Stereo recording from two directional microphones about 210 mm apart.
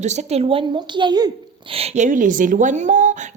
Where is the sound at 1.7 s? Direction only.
30° right (ahead or behind).